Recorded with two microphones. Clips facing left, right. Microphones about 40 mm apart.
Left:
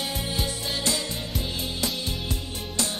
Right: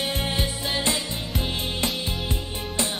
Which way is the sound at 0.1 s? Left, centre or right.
Right.